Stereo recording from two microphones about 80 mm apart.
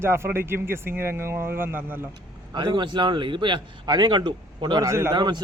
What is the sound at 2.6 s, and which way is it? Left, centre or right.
A man's voice, right.